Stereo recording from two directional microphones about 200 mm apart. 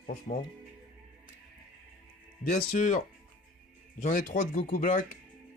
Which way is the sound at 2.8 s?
40° left (ahead or behind).